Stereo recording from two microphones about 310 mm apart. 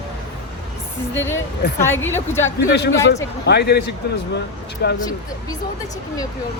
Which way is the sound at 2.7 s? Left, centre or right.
Left.